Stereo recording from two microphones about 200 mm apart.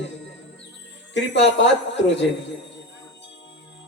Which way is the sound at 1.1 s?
65° left (ahead or behind).